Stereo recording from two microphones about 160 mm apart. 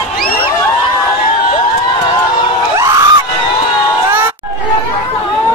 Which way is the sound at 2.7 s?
20° right (ahead or behind).